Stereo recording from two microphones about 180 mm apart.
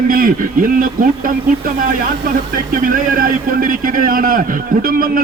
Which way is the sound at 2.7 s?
50° right (ahead or behind).